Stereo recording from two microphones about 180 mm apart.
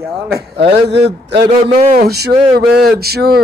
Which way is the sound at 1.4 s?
45° right (ahead or behind).